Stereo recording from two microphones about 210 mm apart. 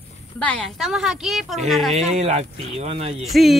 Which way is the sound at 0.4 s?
5° left (ahead or behind).